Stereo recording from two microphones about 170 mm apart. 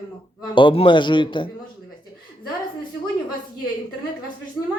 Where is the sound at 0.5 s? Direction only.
30° left (ahead or behind).